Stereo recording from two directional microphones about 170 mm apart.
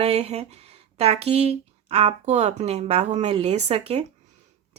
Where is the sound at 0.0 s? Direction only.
35° right (ahead or behind).